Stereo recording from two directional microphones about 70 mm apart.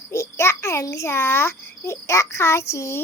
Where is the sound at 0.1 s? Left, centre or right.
Left.